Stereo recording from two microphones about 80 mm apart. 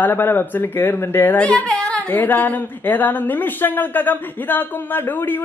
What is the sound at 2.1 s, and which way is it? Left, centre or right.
A man's voice, left.